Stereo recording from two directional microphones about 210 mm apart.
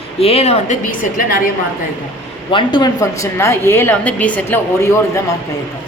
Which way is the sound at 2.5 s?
20° left (ahead or behind).